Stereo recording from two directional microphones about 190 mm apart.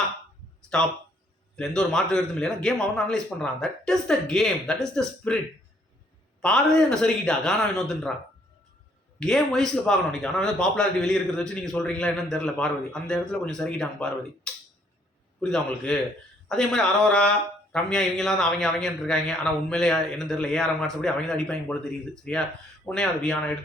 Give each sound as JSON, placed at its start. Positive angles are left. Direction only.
{"t": 0.7, "sound": "speech", "side_deg": 5}
{"t": 6.4, "sound": "speech", "side_deg": 5}
{"t": 9.2, "sound": "speech", "side_deg": 0}